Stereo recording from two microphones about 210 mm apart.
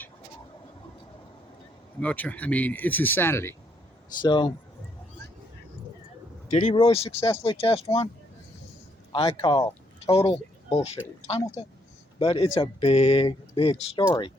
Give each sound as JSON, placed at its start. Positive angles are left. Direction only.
{"t": 2.0, "sound": "speech", "side_deg": 5}
{"t": 4.2, "sound": "speech", "side_deg": 20}
{"t": 6.5, "sound": "speech", "side_deg": 35}
{"t": 9.1, "sound": "speech", "side_deg": 20}